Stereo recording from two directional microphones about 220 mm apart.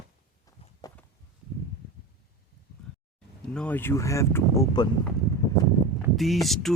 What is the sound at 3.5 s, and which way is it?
Speech, 5° left (ahead or behind).